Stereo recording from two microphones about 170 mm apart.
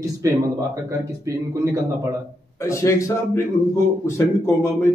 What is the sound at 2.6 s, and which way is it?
Speech, 15° left (ahead or behind).